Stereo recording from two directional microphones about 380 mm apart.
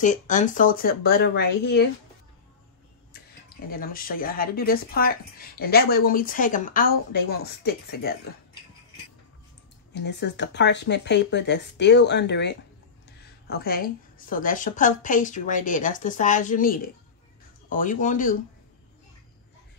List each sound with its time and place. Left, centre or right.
0.0 s speech: centre
3.7 s speech: left
9.9 s speech: left